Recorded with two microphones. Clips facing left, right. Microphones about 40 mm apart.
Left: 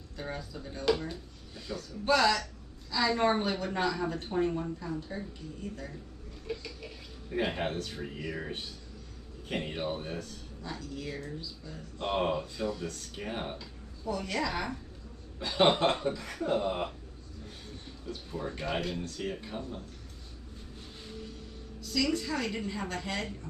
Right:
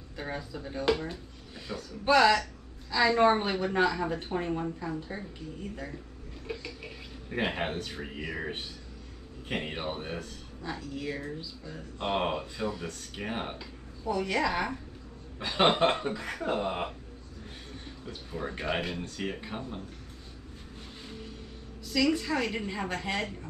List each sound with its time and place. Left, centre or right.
0.2 s a woman's voice: centre
6.4 s a sound: centre
7.2 s speech: right
10.7 s speech: centre
15.3 s speech: right
18.0 s speech: right
21.9 s a woman's voice: centre